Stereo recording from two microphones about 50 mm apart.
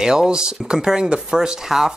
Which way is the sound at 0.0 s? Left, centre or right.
Centre.